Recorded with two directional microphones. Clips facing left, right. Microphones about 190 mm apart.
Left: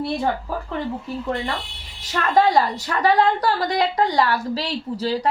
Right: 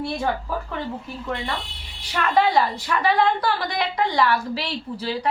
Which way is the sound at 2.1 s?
40° left (ahead or behind).